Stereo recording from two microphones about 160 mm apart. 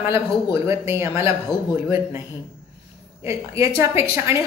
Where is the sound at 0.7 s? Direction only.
15° right (ahead or behind).